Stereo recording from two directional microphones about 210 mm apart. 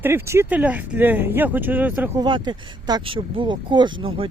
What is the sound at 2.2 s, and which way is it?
Speech, 20° right (ahead or behind).